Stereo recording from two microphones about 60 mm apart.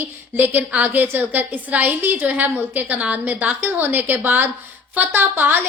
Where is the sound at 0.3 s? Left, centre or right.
Right.